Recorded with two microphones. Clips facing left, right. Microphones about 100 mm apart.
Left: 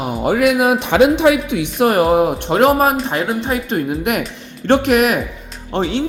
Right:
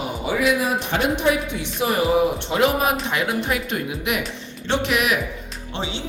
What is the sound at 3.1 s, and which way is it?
Speech, 35° left (ahead or behind).